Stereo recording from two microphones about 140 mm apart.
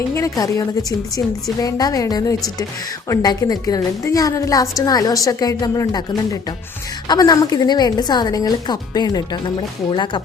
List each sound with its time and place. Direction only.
0.1 s speech: 25° left (ahead or behind)